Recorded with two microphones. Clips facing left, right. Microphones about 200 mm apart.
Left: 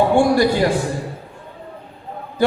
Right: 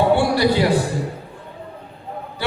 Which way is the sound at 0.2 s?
45° left (ahead or behind).